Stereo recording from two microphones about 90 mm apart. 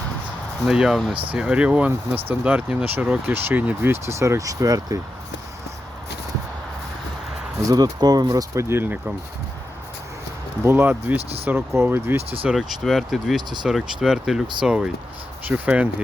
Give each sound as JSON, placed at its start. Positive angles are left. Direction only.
{"t": 0.6, "sound": "speech", "side_deg": -5}
{"t": 1.1, "sound": "speech", "side_deg": -75}
{"t": 1.4, "sound": "speech", "side_deg": -10}
{"t": 7.6, "sound": "speech", "side_deg": -45}
{"t": 8.7, "sound": "speech", "side_deg": -20}
{"t": 10.6, "sound": "speech", "side_deg": -25}
{"t": 12.5, "sound": "speech", "side_deg": 0}